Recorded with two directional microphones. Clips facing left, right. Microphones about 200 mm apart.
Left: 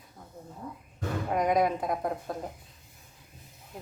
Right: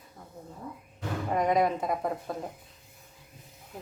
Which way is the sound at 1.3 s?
Centre (ahead or behind).